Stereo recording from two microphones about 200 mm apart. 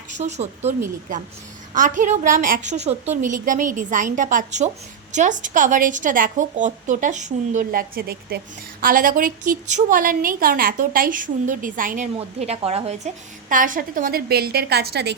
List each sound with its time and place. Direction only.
0.2 s a woman's voice: 35° right (ahead or behind)
1.7 s a woman's voice: 40° right (ahead or behind)
12.1 s a woman's voice: 30° right (ahead or behind)
13.5 s a woman's voice: 40° right (ahead or behind)